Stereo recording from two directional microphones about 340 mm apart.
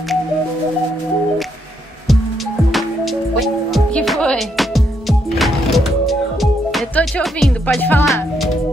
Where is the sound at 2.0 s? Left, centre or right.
Centre.